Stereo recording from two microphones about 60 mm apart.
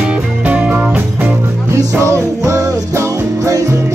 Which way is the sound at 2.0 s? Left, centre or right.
Right.